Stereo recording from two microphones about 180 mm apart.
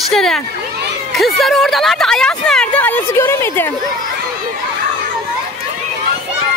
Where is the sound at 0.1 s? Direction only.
Centre (ahead or behind).